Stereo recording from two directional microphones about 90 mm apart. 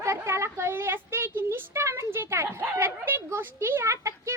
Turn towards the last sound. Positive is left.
turn(degrees=-30)  # may be behind; listen again after turning